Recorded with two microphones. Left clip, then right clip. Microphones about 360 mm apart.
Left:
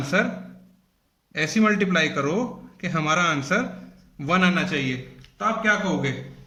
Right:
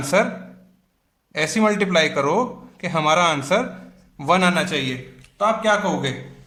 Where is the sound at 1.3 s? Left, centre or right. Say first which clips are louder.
Right 2 dB; centre.